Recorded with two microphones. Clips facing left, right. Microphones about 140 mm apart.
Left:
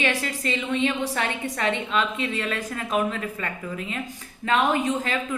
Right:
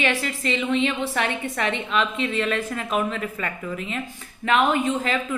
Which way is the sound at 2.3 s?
40° left (ahead or behind).